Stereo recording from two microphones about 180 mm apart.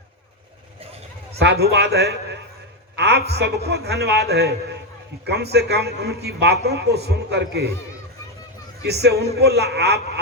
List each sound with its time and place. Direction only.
1.4 s a man's voice: 65° right (ahead or behind)
8.8 s a man's voice: 65° right (ahead or behind)